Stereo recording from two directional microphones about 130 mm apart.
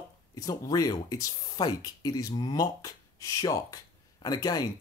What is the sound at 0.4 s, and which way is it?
Speech, 30° left (ahead or behind).